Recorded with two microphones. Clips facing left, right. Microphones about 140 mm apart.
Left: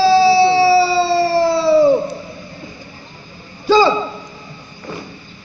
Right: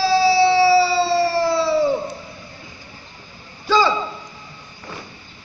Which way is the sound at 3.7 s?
15° left (ahead or behind).